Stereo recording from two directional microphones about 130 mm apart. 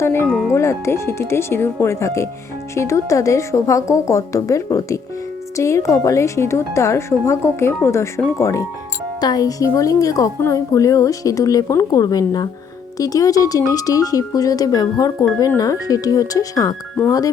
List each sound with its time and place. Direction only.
0.0 s a woman's voice: 20° left (ahead or behind)
0.3 s speech: centre (ahead or behind)
0.5 s a woman's voice: 20° left (ahead or behind)